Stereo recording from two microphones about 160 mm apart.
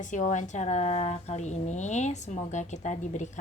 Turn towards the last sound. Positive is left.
turn(degrees=50)  # may be behind; listen again after turning